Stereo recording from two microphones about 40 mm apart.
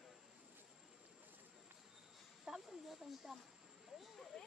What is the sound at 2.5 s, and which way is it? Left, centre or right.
Snake, centre.